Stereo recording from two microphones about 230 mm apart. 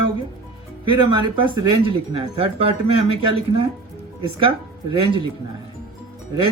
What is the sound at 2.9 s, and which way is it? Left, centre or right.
Speech, left.